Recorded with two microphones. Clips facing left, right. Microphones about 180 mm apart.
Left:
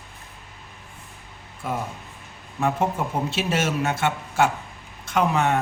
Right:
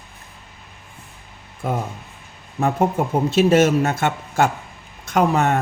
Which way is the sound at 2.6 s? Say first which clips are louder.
Right 4 dB; 45° right (ahead or behind).